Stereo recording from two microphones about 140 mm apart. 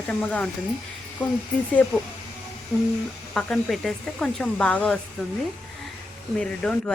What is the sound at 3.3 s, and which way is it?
Speech, 5° left (ahead or behind).